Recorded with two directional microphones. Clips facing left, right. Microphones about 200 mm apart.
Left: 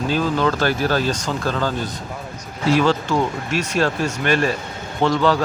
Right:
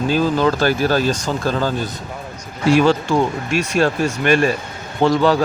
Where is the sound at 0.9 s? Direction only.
10° right (ahead or behind).